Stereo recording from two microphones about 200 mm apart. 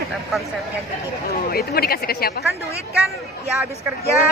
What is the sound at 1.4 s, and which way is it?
Speech, 50° left (ahead or behind).